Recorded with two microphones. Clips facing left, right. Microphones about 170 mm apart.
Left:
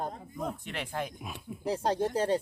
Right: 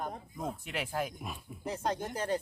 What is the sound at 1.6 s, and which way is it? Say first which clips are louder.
Speech: left 6 dB; 30° left (ahead or behind).